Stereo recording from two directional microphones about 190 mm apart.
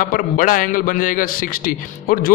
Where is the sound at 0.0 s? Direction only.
45° left (ahead or behind).